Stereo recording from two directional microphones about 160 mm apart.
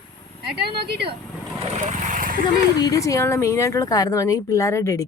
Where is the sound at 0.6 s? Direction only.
90° right.